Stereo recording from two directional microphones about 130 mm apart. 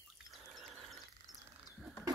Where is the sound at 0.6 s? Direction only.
Centre (ahead or behind).